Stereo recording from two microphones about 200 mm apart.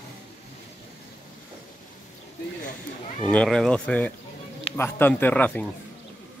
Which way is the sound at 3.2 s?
Centre (ahead or behind).